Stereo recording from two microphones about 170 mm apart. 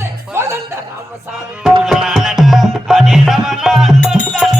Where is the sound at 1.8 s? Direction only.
Centre (ahead or behind).